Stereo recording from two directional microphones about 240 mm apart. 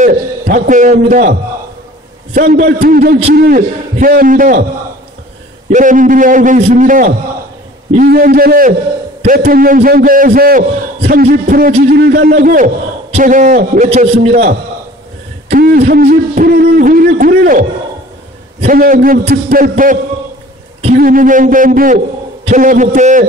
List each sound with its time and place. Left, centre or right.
0.0 s a man's voice: right
5.7 s a man's voice: right
15.5 s a man's voice: right